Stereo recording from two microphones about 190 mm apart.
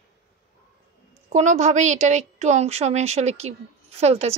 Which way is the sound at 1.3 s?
40° right (ahead or behind).